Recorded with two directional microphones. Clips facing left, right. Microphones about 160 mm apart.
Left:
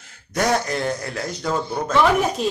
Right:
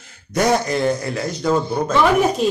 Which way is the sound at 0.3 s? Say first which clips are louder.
Right 3 dB; 10° right (ahead or behind).